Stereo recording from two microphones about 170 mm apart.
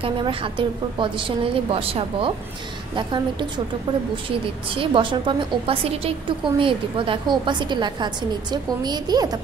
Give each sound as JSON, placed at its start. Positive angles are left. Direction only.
{"t": 0.0, "sound": "a woman's voice", "side_deg": -30}
{"t": 4.6, "sound": "a woman's voice", "side_deg": -30}